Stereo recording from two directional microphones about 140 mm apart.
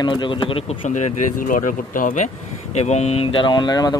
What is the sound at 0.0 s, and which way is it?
Speech, 35° left (ahead or behind).